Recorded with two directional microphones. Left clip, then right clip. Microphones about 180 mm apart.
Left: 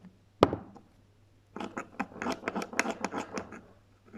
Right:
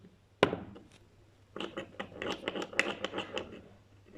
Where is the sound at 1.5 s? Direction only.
5° left (ahead or behind).